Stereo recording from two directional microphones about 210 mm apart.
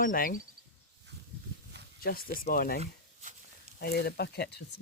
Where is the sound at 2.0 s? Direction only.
45° left (ahead or behind).